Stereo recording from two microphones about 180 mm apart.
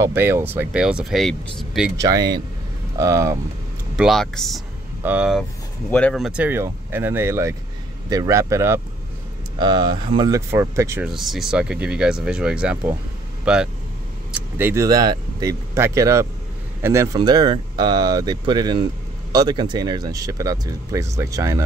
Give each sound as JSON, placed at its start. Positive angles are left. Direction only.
{"t": 0.0, "sound": "speech", "side_deg": -10}
{"t": 2.0, "sound": "speech", "side_deg": -20}
{"t": 3.9, "sound": "speech", "side_deg": 0}
{"t": 5.9, "sound": "speech", "side_deg": 5}
{"t": 9.6, "sound": "speech", "side_deg": -25}
{"t": 11.1, "sound": "speech", "side_deg": 0}
{"t": 14.6, "sound": "speech", "side_deg": -15}